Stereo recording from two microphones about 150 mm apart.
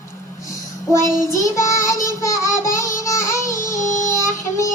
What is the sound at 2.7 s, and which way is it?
Music, 20° left (ahead or behind).